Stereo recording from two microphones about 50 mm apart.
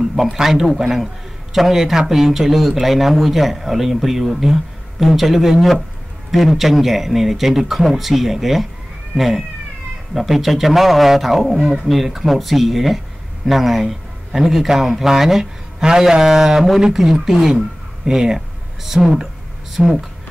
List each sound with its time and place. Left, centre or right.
0.0 s a man's voice: centre
9.1 s cat: centre
10.1 s a man's voice: centre
11.6 s speech: centre
11.9 s a man's voice: centre